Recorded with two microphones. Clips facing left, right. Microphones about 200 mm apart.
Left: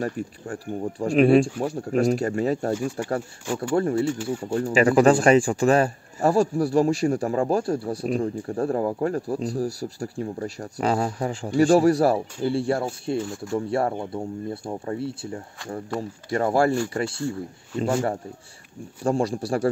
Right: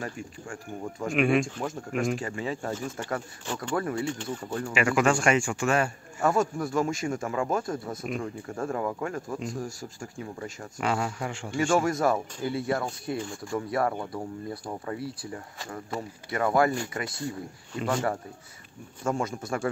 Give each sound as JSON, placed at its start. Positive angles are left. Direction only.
{"t": 0.0, "sound": "speech", "side_deg": 35}
{"t": 2.7, "sound": "speech", "side_deg": 10}
{"t": 3.7, "sound": "speech", "side_deg": 30}
{"t": 4.0, "sound": "speech", "side_deg": 10}
{"t": 4.6, "sound": "speech", "side_deg": 35}
{"t": 19.0, "sound": "speech", "side_deg": 35}